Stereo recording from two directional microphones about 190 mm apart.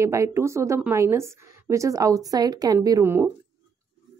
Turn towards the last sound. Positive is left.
turn(degrees=-10)  # may be behind; listen again after turning